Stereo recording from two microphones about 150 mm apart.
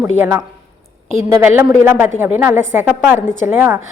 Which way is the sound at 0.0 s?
15° right (ahead or behind).